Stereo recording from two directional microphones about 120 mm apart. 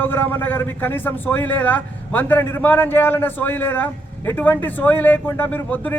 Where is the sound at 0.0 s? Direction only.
15° left (ahead or behind).